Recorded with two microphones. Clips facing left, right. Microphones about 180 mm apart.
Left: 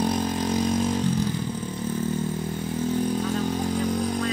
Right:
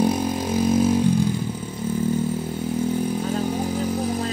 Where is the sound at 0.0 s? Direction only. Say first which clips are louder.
Right 3 dB; 10° right (ahead or behind).